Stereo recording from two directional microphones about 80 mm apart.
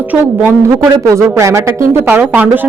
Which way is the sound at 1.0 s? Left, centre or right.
Right.